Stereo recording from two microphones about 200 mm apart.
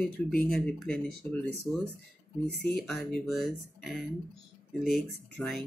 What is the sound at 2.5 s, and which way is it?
Speech, 55° left (ahead or behind).